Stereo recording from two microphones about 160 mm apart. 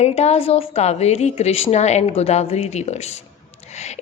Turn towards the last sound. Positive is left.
turn(degrees=45)  # may be behind; listen again after turning